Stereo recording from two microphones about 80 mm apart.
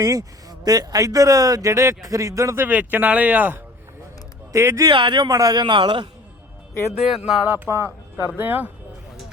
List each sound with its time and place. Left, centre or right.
0.0 s speech: right
2.6 s speech: right
4.5 s speech: right
4.9 s speech: right
5.3 s speech: right
5.5 s a man's voice: right
7.1 s speech: centre
7.5 s speech: right
8.3 s speech: right